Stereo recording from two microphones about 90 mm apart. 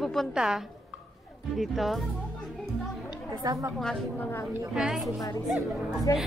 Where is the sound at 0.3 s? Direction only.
5° right (ahead or behind).